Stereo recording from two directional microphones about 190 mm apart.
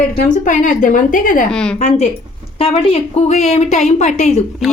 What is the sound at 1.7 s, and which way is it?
A woman's voice, 35° left (ahead or behind).